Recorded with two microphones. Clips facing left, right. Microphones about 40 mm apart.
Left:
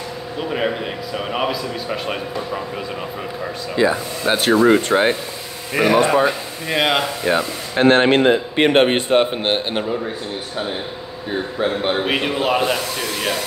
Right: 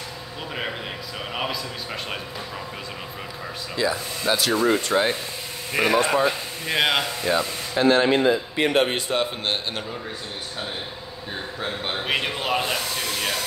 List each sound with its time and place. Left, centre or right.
0.4 s a man's voice: centre
3.7 s speech: left
5.8 s speech: centre
7.2 s speech: left
11.6 s a man's voice: left
12.0 s a man's voice: centre